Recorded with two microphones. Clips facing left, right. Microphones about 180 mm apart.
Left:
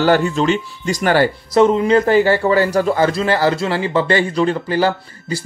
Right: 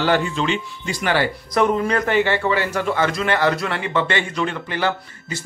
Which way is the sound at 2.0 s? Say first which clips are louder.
Left 5 dB; 35° left (ahead or behind).